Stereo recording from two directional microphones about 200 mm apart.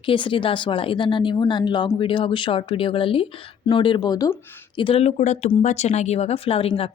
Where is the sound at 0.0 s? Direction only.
25° left (ahead or behind).